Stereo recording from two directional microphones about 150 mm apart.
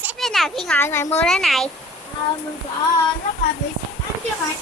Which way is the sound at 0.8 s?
15° left (ahead or behind).